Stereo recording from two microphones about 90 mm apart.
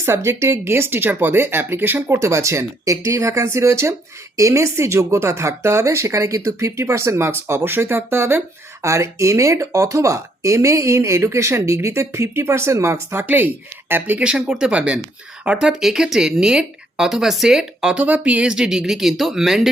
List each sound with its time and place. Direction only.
0.0 s speech: 30° right (ahead or behind)
14.2 s speech: 10° right (ahead or behind)